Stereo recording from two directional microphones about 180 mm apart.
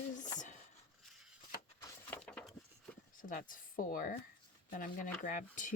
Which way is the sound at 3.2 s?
50° left (ahead or behind).